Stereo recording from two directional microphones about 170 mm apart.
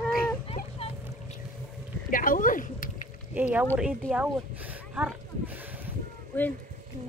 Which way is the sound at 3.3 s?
10° right (ahead or behind).